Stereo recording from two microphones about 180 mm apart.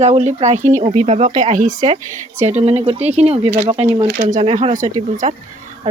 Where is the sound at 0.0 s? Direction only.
35° right (ahead or behind).